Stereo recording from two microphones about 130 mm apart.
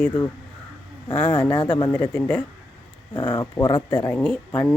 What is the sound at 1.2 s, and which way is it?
Speech, 10° left (ahead or behind).